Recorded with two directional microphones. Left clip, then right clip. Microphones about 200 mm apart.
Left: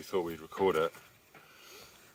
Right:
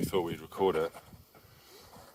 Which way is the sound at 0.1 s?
30° right (ahead or behind).